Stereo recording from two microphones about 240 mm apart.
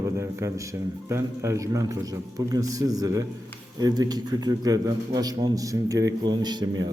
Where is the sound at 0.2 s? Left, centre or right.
Centre.